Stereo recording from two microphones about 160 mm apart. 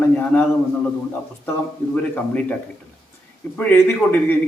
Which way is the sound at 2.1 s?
10° left (ahead or behind).